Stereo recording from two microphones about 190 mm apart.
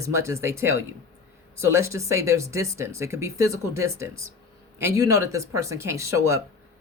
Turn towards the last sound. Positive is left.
turn(degrees=-15)  # may be behind; listen again after turning